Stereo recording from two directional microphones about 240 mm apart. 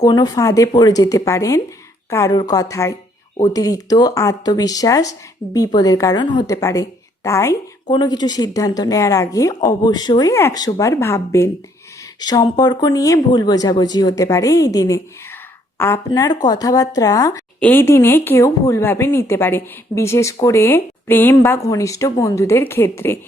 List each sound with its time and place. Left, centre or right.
0.0 s speech: centre